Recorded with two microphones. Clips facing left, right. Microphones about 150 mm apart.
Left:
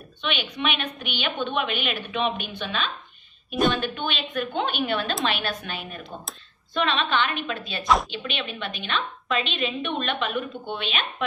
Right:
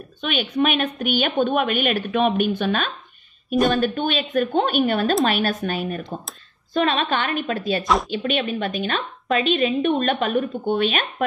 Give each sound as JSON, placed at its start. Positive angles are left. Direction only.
{"t": 0.2, "sound": "a woman's voice", "side_deg": -45}